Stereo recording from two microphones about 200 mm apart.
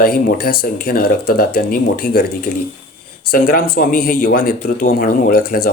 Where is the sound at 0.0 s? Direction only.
50° left (ahead or behind).